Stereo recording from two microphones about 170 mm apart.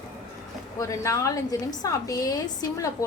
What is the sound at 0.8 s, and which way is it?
A woman's voice, 20° left (ahead or behind).